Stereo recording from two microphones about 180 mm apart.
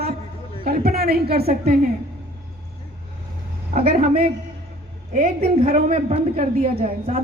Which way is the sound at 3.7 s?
50° right (ahead or behind).